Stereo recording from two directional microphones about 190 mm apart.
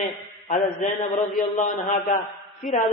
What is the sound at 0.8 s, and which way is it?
Speech, 40° left (ahead or behind).